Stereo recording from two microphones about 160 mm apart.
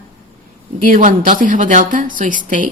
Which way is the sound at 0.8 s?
55° right (ahead or behind).